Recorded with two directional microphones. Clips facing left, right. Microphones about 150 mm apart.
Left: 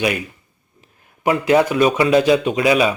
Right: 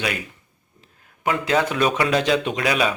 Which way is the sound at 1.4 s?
15° left (ahead or behind).